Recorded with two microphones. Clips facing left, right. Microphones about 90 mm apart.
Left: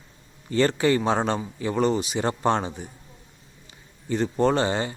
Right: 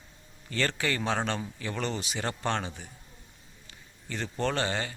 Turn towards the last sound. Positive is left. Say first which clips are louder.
# left 8 dB
turn(degrees=25)  # may be behind; listen again after turning